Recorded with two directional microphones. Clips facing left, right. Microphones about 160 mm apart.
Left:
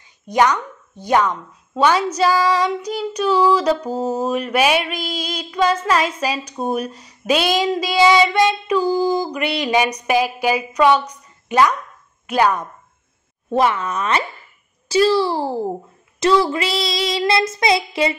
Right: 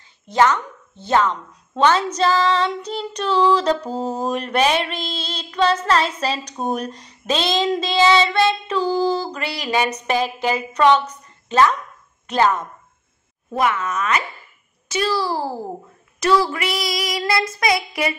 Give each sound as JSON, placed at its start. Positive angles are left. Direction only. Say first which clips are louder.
{"t": 0.3, "sound": "speech", "louder": "even", "side_deg": 15}
{"t": 13.5, "sound": "speech", "louder": "left 3 dB", "side_deg": 30}
{"t": 14.9, "sound": "child singing", "louder": "left 6 dB", "side_deg": 30}